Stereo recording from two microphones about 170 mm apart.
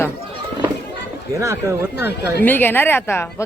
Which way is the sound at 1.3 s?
15° right (ahead or behind).